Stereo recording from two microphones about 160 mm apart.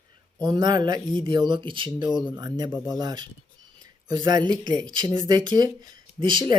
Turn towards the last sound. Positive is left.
turn(degrees=-30)  # may be behind; listen again after turning